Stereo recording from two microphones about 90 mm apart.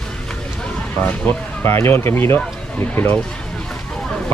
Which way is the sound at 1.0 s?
20° left (ahead or behind).